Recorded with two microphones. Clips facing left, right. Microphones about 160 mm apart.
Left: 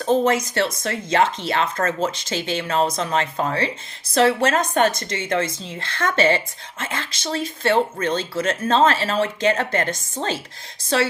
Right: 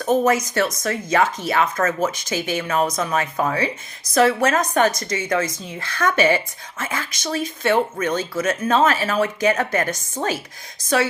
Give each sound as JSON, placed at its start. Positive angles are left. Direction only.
{"t": 0.3, "sound": "speech", "side_deg": 25}